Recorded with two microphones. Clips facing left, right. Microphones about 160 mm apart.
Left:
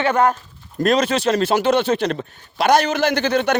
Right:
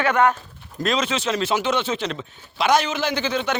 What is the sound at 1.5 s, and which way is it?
Speech, 35° left (ahead or behind).